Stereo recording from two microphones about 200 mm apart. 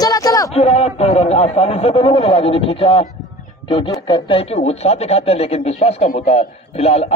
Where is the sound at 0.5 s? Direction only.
30° left (ahead or behind).